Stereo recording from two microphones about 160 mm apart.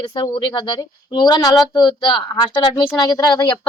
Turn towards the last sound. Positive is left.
turn(degrees=25)  # may be behind; listen again after turning